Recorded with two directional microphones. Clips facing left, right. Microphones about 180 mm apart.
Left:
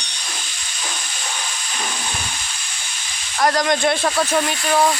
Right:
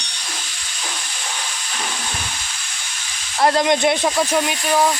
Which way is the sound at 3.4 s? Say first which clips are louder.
Right 2 dB; 25° right (ahead or behind).